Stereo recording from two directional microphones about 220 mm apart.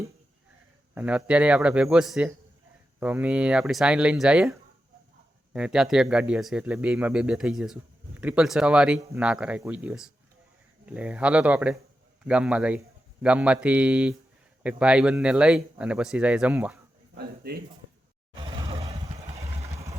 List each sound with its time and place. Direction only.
0.9 s speech: 5° right (ahead or behind)
5.5 s speech: 5° right (ahead or behind)
17.2 s speech: 45° right (ahead or behind)
18.3 s a sound: 20° right (ahead or behind)
18.9 s vehicle: 30° right (ahead or behind)
19.7 s vehicle: 15° right (ahead or behind)